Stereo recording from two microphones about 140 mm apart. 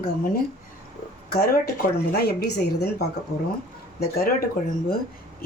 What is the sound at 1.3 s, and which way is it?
Speech, 90° left.